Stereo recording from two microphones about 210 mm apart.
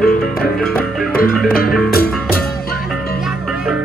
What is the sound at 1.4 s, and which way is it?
Music, 45° left (ahead or behind).